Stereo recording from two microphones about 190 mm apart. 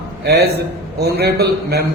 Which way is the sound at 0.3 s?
55° right (ahead or behind).